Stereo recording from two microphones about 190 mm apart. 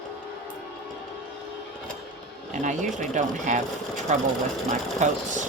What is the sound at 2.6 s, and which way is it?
Speech, 40° right (ahead or behind).